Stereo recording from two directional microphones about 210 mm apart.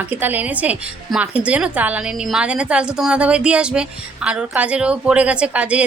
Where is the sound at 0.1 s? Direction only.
10° right (ahead or behind).